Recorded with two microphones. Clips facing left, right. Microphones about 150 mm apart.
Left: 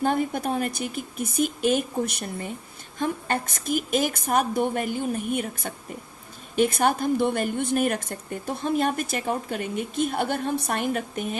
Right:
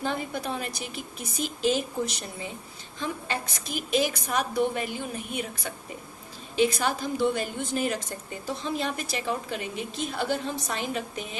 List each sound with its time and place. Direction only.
0.0 s a woman's voice: 50° left (ahead or behind)